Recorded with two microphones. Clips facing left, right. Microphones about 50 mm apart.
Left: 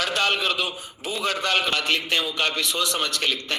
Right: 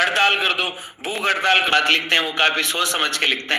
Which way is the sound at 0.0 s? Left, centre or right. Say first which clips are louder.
Right 5 dB; right.